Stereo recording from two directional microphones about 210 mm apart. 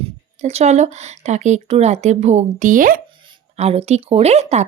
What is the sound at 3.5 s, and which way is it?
Speech, 30° right (ahead or behind).